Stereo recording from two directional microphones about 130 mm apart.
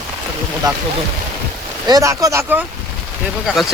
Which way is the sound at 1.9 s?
25° right (ahead or behind).